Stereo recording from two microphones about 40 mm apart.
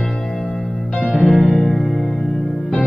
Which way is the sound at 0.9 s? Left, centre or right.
Left.